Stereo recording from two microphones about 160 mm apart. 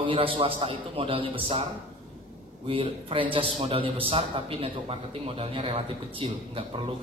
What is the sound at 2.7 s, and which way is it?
A man's voice, 35° right (ahead or behind).